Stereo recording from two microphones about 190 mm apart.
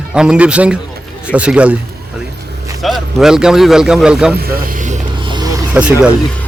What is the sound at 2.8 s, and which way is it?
Speech, centre (ahead or behind).